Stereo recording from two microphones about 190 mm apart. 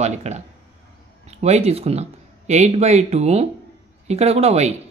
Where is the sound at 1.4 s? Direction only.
35° right (ahead or behind).